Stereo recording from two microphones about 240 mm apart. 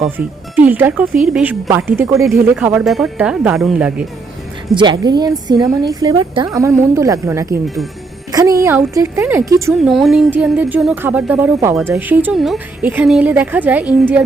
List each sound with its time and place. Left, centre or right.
0.5 s speech: centre
4.7 s speech: centre
9.9 s speech: centre